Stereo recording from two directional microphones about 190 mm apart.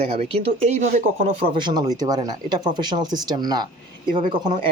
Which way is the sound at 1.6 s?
20° right (ahead or behind).